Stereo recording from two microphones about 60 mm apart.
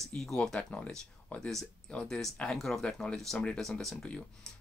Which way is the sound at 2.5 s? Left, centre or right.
Centre.